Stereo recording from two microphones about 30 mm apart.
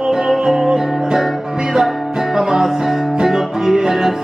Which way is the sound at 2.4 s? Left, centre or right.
Centre.